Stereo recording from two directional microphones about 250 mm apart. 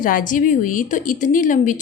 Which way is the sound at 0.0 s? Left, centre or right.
Left.